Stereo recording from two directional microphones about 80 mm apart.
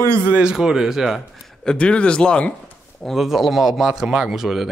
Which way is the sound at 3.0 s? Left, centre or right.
Centre.